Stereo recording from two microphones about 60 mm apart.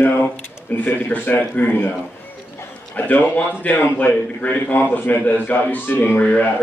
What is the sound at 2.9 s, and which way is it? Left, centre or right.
A man's voice, left.